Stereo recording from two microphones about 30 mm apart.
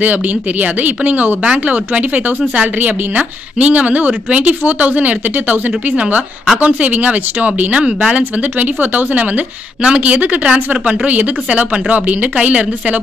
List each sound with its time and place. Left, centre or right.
0.0 s speech: right
1.4 s a woman's voice: right
8.2 s speech: right
9.9 s a woman's voice: right